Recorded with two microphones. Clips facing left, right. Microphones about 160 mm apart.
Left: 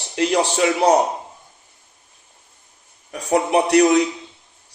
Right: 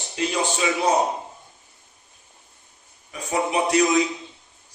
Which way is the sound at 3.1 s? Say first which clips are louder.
Left 6 dB; 70° left (ahead or behind).